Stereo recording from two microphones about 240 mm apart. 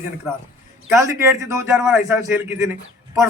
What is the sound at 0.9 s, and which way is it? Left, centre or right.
A man's voice, centre.